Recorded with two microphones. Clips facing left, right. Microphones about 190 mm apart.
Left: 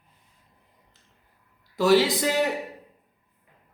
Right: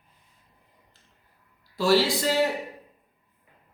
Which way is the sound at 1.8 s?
20° left (ahead or behind).